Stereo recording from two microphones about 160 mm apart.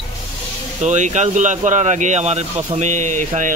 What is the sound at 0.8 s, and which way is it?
Speech, 50° right (ahead or behind).